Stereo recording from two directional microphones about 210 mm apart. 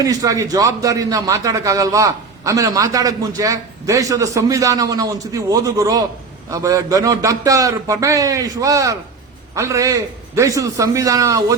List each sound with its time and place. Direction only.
0.0 s a man's voice: 15° right (ahead or behind)